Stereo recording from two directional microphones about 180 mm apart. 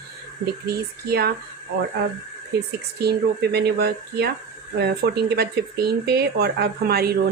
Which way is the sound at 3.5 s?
65° right (ahead or behind).